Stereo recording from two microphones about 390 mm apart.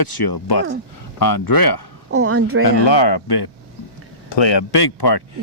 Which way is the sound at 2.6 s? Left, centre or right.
Left.